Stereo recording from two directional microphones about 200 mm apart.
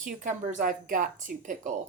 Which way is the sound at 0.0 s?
40° right (ahead or behind).